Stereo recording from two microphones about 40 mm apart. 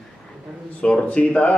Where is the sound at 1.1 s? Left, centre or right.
Left.